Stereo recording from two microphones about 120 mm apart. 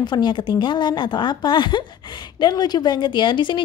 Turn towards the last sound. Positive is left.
turn(degrees=40)  # may be behind; listen again after turning